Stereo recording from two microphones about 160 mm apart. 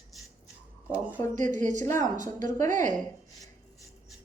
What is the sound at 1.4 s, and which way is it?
Speech, 50° right (ahead or behind).